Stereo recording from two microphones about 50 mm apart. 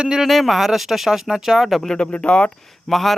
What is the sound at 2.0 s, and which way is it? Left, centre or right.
Speech, left.